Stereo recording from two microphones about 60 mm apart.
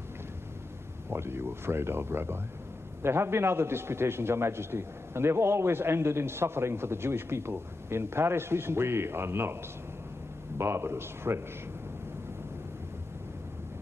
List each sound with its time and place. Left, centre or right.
1.1 s a man's voice: right
10.6 s a man's voice: right